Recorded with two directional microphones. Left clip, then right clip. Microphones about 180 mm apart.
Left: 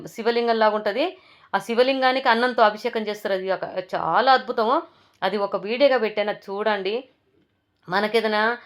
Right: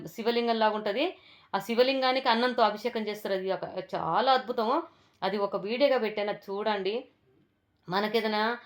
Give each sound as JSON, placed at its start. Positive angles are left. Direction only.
{"t": 0.0, "sound": "a woman's voice", "side_deg": 25}